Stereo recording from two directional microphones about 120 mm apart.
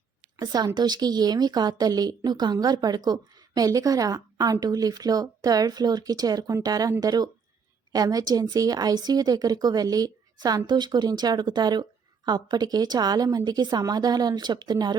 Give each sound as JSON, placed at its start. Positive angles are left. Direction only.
{"t": 0.3, "sound": "a woman's voice", "side_deg": -35}